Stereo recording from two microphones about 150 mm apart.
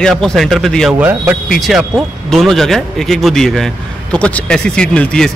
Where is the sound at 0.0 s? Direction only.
5° left (ahead or behind).